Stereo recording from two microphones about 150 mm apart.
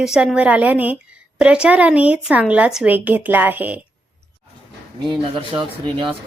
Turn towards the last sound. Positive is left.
turn(degrees=-35)  # may be behind; listen again after turning